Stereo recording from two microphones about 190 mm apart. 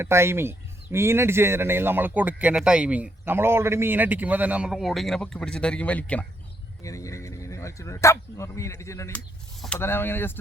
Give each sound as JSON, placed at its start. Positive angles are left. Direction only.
{"t": 0.0, "sound": "speech", "side_deg": -15}